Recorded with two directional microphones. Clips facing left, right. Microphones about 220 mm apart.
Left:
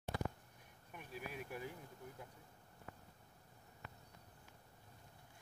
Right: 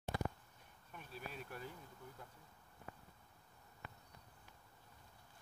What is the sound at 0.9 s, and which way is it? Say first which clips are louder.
Bee: left 2 dB; 15° left (ahead or behind).